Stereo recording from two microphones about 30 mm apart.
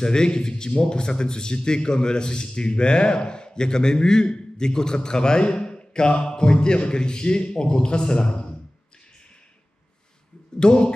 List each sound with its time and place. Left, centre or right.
0.0 s a man's voice: left
8.3 s a sound: left
10.6 s speech: left